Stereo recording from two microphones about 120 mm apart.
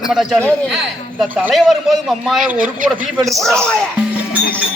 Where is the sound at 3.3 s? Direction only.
Centre (ahead or behind).